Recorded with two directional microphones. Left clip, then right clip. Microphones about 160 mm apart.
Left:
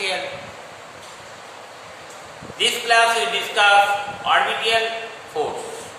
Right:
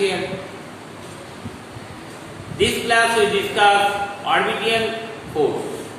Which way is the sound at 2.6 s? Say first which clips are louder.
Even; 15° left (ahead or behind).